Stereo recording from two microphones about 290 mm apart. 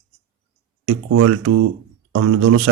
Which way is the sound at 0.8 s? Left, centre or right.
Right.